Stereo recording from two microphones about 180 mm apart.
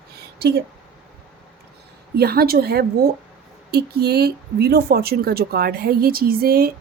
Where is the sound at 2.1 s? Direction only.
60° right (ahead or behind).